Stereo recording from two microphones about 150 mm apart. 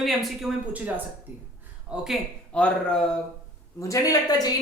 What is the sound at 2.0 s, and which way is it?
Speech, centre (ahead or behind).